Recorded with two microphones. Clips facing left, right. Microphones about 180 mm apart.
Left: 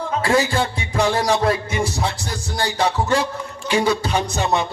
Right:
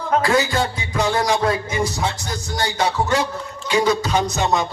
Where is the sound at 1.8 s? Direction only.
30° left (ahead or behind).